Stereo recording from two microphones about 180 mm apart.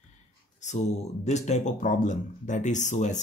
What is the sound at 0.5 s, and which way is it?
Speech, 40° left (ahead or behind).